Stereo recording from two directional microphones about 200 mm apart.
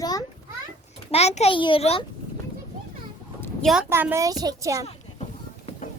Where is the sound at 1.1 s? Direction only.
30° left (ahead or behind).